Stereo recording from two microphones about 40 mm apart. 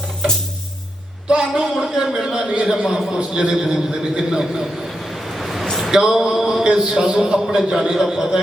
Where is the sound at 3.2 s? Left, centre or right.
Right.